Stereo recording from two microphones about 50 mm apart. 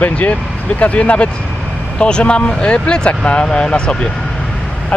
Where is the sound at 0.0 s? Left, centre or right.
Left.